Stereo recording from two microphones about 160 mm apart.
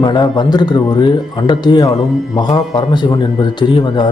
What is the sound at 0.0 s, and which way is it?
Speech, 25° left (ahead or behind).